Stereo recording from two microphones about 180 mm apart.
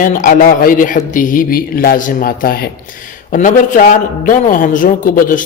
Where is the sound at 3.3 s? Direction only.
45° left (ahead or behind).